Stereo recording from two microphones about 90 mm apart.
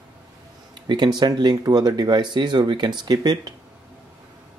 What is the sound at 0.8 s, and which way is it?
Speech, 60° right (ahead or behind).